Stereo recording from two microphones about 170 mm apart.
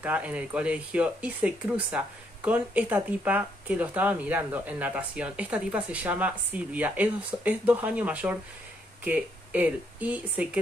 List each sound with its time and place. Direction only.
0.0 s speech: 10° right (ahead or behind)